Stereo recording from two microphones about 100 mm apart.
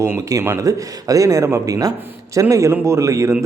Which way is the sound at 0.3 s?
30° right (ahead or behind).